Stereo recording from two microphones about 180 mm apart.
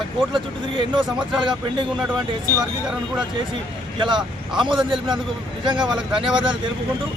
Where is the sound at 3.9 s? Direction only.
25° right (ahead or behind).